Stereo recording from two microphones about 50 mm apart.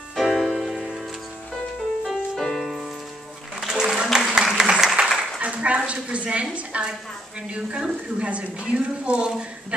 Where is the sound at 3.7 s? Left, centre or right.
Centre.